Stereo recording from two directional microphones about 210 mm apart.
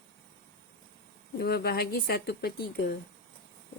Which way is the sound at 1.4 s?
50° left (ahead or behind).